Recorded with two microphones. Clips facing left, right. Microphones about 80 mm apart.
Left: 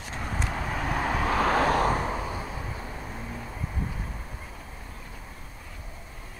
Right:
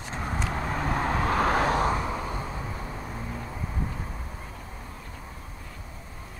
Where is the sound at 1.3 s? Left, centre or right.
Right.